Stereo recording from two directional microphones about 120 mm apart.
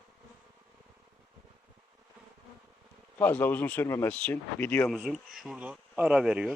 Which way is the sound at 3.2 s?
15° left (ahead or behind).